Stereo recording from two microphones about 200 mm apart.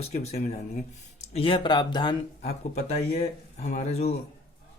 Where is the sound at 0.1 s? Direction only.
35° left (ahead or behind).